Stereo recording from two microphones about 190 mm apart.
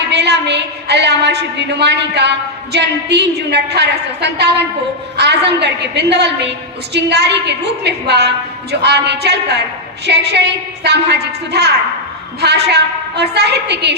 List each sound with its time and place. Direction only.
0.1 s a woman's voice: 60° right (ahead or behind)